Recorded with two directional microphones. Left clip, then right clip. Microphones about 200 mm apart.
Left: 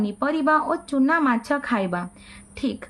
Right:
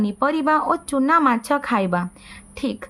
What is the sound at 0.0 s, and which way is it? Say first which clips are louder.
A woman's voice: right 3 dB; 30° right (ahead or behind).